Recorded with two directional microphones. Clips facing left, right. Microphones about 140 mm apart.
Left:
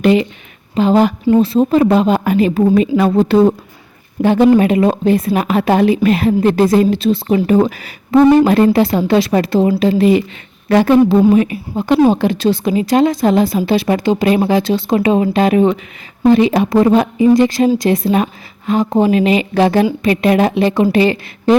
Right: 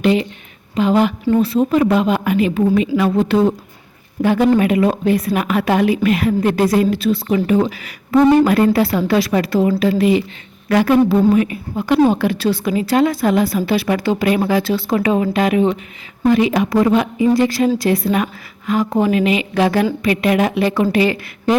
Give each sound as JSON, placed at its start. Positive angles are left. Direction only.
{"t": 0.8, "sound": "a woman's voice", "side_deg": 35}